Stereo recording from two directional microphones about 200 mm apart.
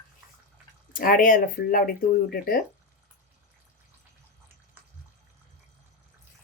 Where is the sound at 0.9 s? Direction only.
45° left (ahead or behind).